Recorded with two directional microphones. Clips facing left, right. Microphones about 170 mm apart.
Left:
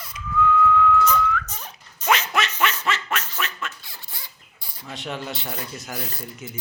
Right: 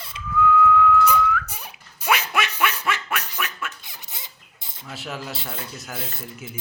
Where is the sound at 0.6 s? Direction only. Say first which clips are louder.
Right 1 dB; 10° right (ahead or behind).